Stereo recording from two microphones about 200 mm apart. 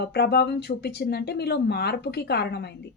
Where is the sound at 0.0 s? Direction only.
55° left (ahead or behind).